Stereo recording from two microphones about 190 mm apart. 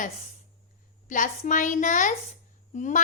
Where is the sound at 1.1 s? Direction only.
45° left (ahead or behind).